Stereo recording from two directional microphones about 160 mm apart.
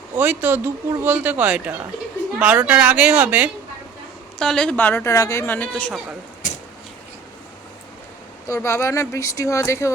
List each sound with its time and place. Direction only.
0.2 s speech: 10° right (ahead or behind)
4.4 s speech: 5° left (ahead or behind)
6.4 s a sound: 55° left (ahead or behind)
8.4 s speech: 20° left (ahead or behind)